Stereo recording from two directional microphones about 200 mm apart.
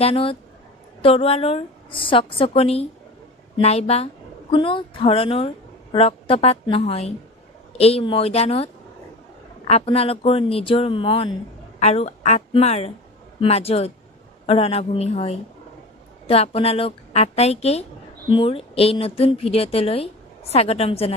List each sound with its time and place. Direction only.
0.0 s a woman's voice: 30° left (ahead or behind)
9.7 s a woman's voice: 30° left (ahead or behind)